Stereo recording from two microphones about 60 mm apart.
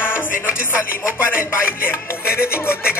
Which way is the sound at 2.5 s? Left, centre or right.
Left.